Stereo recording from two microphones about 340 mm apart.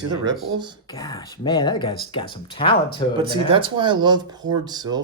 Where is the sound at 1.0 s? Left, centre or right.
Centre.